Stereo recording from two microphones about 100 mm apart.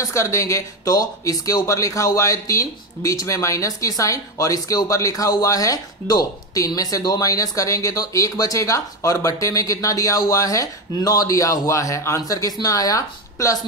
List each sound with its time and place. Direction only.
0.0 s speech: 30° left (ahead or behind)